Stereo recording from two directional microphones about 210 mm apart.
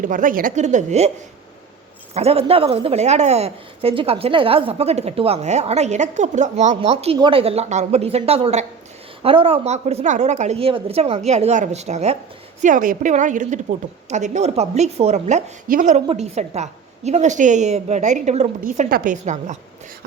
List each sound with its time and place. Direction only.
0.0 s a woman's voice: 40° right (ahead or behind)
2.1 s a woman's voice: 30° right (ahead or behind)